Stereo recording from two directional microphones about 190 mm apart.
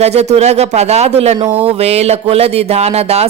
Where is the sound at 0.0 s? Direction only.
35° right (ahead or behind).